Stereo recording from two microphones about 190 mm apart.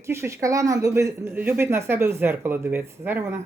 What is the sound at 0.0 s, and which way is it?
A woman's voice, 15° right (ahead or behind).